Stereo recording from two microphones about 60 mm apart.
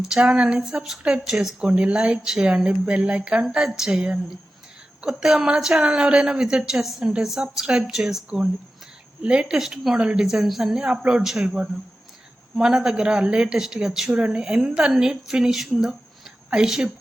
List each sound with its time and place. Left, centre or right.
0.1 s speech: centre
1.6 s speech: centre
9.2 s speech: centre